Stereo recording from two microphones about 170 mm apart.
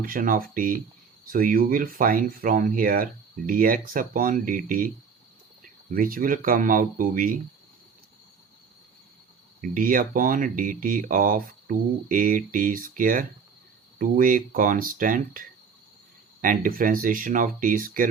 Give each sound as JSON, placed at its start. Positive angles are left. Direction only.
{"t": 0.0, "sound": "speech", "side_deg": -55}
{"t": 9.7, "sound": "speech", "side_deg": -55}